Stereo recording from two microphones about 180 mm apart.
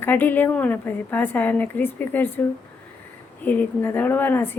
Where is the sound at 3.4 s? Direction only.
10° left (ahead or behind).